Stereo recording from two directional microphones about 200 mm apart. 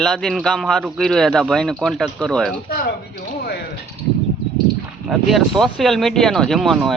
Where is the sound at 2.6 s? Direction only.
50° left (ahead or behind).